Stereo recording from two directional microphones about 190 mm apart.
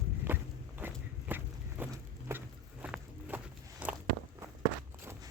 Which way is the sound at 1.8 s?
10° right (ahead or behind).